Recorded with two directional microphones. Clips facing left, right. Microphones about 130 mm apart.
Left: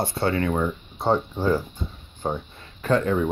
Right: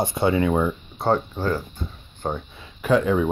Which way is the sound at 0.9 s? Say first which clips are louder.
Even; centre (ahead or behind).